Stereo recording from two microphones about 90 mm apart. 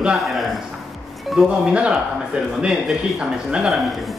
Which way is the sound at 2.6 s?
10° right (ahead or behind).